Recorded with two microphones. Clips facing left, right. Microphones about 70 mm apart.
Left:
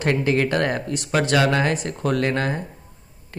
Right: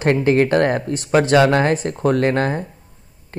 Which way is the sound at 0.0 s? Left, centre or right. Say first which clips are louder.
Right 5 dB; right.